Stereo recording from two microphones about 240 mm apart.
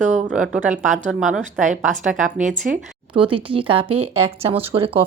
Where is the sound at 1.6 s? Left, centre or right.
Right.